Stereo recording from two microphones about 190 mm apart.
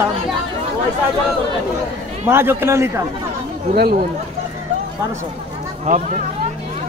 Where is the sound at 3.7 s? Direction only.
55° right (ahead or behind).